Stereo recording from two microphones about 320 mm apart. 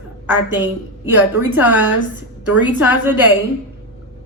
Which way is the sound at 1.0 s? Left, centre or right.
Centre.